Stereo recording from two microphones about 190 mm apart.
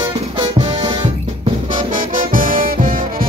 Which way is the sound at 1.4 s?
45° right (ahead or behind).